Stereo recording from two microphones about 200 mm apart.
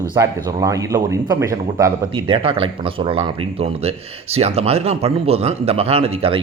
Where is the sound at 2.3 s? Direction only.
25° right (ahead or behind).